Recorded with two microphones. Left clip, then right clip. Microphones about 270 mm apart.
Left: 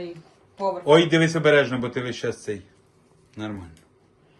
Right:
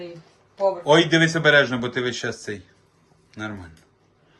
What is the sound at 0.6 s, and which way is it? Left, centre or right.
Speech, right.